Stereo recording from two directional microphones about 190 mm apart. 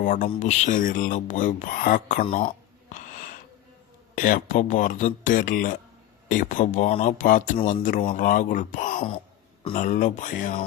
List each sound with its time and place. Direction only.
0.0 s speech: 45° left (ahead or behind)
2.9 s a sound: 45° left (ahead or behind)
4.1 s speech: 45° left (ahead or behind)